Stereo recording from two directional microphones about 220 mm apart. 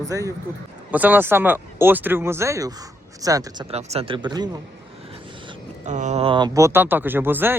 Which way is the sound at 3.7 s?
30° right (ahead or behind).